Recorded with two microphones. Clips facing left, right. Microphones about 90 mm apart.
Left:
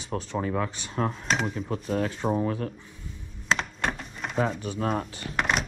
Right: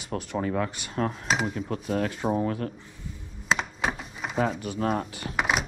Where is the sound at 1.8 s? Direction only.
50° right (ahead or behind).